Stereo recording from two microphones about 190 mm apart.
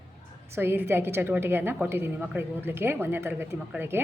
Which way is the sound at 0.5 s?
10° right (ahead or behind).